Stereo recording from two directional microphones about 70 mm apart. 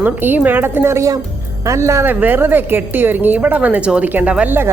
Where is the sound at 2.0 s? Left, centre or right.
Right.